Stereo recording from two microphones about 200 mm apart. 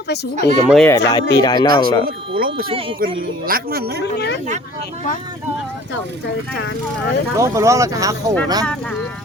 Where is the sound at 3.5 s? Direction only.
50° right (ahead or behind).